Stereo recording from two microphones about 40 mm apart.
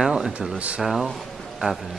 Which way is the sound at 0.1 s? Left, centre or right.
Centre.